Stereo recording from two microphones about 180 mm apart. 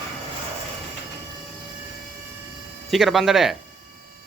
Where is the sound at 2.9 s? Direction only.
Centre (ahead or behind).